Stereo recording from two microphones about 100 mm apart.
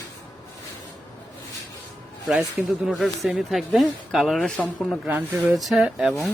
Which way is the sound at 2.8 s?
Centre (ahead or behind).